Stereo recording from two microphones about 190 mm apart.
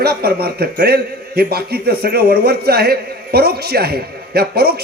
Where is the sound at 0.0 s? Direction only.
55° right (ahead or behind).